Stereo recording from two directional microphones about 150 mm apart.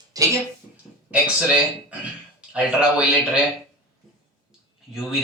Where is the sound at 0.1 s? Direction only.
25° right (ahead or behind).